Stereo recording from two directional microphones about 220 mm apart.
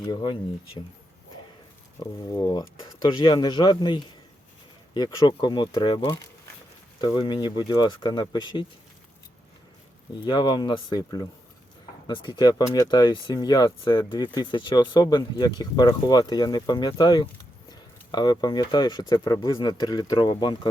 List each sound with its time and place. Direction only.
0.0 s speech: 20° left (ahead or behind)
2.0 s speech: 15° left (ahead or behind)
7.0 s speech: 20° left (ahead or behind)
10.2 s speech: 20° left (ahead or behind)